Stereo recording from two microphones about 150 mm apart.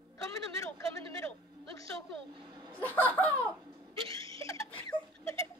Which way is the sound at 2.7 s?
10° left (ahead or behind).